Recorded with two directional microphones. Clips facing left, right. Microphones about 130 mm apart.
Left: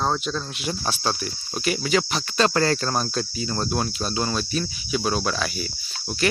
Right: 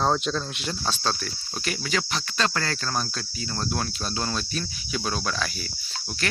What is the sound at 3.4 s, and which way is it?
Cricket, 20° left (ahead or behind).